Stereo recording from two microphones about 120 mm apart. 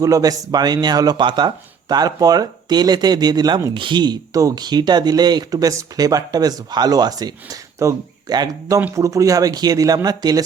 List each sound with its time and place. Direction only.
0.0 s speech: 30° right (ahead or behind)